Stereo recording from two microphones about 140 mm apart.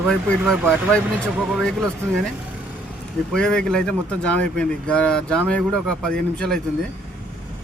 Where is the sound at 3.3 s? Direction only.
5° left (ahead or behind).